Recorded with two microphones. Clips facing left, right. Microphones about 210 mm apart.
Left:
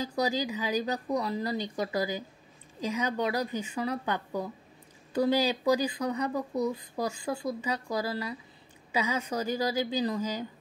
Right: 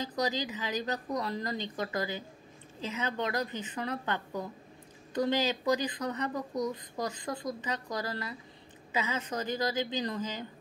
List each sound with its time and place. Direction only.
0.1 s speech: 10° left (ahead or behind)